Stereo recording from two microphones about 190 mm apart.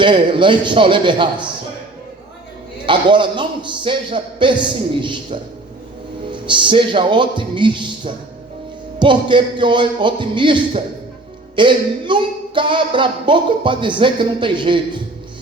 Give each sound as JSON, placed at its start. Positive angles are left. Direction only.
{"t": 0.0, "sound": "speech", "side_deg": -25}
{"t": 2.8, "sound": "speech", "side_deg": -25}